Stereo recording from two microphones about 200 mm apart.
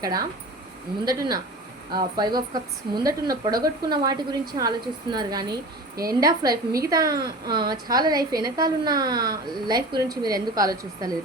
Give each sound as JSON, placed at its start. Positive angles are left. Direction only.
{"t": 0.0, "sound": "a woman's voice", "side_deg": -20}